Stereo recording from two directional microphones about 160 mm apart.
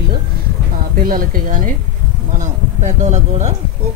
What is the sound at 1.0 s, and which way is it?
Speech, 65° right (ahead or behind).